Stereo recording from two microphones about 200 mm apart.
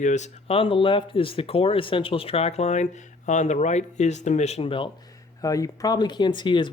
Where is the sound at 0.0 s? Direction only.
35° left (ahead or behind).